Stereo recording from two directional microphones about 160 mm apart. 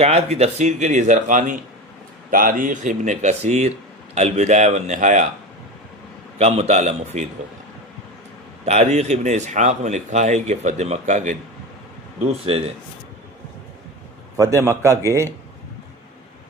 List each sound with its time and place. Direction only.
0.0 s a man's voice: 40° right (ahead or behind)
6.4 s a man's voice: 45° right (ahead or behind)
8.6 s a man's voice: 45° right (ahead or behind)
14.3 s a man's voice: 20° right (ahead or behind)